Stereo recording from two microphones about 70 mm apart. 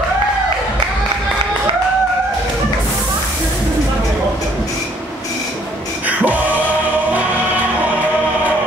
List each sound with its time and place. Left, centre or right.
6.0 s music: right